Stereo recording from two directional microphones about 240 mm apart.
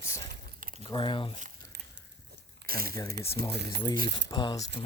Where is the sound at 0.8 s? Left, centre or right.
Left.